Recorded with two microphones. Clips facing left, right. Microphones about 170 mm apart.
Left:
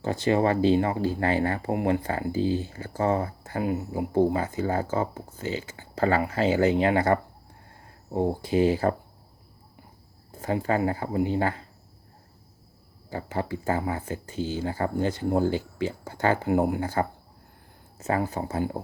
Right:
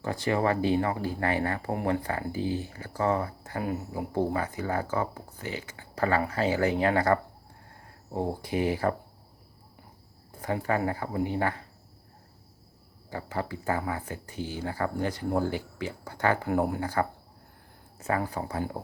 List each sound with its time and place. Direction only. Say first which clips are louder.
0.0 s speech: left 4 dB; 25° left (ahead or behind)
10.3 s speech: left 3 dB; 25° left (ahead or behind)
13.1 s speech: left 3 dB; 25° left (ahead or behind)